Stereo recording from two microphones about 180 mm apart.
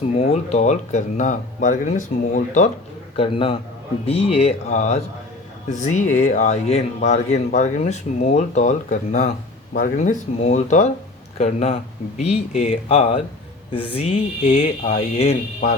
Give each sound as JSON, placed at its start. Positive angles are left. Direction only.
{"t": 0.2, "sound": "speech", "side_deg": 35}
{"t": 3.2, "sound": "a man's voice", "side_deg": 30}
{"t": 14.4, "sound": "speech", "side_deg": 40}